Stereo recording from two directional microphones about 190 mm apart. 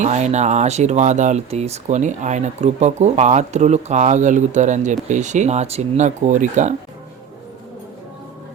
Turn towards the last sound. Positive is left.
turn(degrees=-40)  # may be behind; listen again after turning